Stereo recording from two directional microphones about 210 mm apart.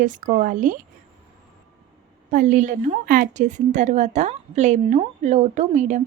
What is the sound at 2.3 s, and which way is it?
A woman's voice, 35° right (ahead or behind).